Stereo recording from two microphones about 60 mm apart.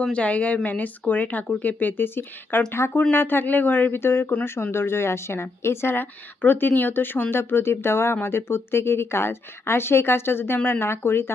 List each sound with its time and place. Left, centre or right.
0.1 s a woman's voice: left
2.7 s a woman's voice: left